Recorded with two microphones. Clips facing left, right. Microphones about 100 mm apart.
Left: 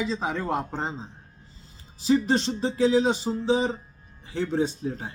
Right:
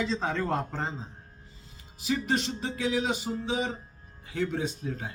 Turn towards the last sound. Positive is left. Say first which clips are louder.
# left 4 dB
turn(degrees=30)  # may be behind; listen again after turning